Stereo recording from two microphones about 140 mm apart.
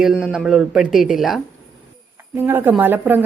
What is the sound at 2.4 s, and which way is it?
Speech, 15° right (ahead or behind).